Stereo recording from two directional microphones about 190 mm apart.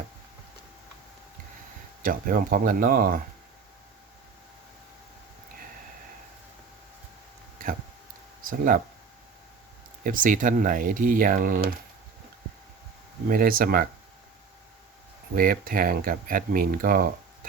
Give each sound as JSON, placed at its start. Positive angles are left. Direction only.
{"t": 2.0, "sound": "speech", "side_deg": -45}
{"t": 8.4, "sound": "speech", "side_deg": -45}
{"t": 10.0, "sound": "speech", "side_deg": -45}
{"t": 13.3, "sound": "speech", "side_deg": -50}
{"t": 15.4, "sound": "speech", "side_deg": -50}